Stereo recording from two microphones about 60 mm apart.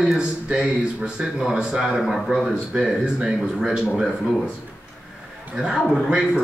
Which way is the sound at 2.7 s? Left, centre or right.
Centre.